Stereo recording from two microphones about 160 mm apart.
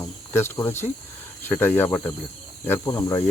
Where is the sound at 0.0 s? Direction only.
15° left (ahead or behind).